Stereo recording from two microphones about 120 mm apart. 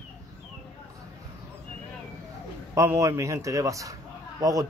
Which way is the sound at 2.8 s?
25° right (ahead or behind).